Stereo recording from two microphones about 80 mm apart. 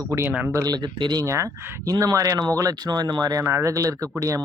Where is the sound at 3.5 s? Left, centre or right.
Right.